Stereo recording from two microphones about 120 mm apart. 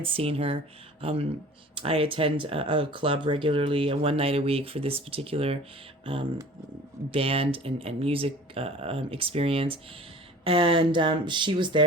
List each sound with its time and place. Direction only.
0.0 s speech: 50° right (ahead or behind)
7.1 s speech: 50° right (ahead or behind)